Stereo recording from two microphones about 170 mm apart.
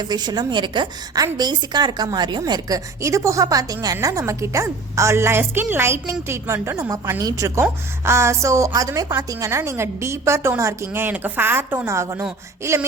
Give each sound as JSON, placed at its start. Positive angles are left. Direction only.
{"t": 0.0, "sound": "a woman's voice", "side_deg": -25}